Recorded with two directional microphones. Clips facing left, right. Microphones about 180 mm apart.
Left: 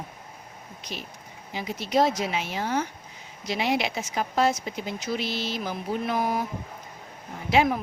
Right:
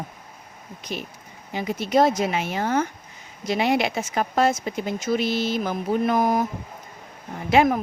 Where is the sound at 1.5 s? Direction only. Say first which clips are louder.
Right 4 dB; 55° right (ahead or behind).